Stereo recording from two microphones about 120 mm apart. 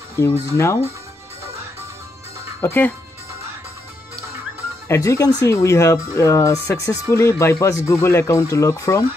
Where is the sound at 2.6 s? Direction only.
15° left (ahead or behind).